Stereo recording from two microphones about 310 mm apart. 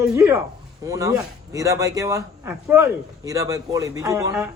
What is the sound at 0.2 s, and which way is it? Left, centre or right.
A man's voice, centre.